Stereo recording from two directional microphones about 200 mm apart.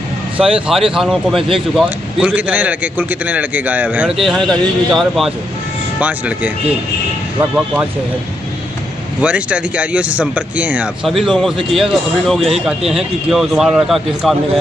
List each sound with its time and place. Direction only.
0.4 s speech: 5° right (ahead or behind)
9.2 s speech: 5° right (ahead or behind)